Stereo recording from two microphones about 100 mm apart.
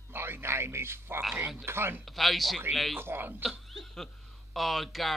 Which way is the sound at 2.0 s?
Centre (ahead or behind).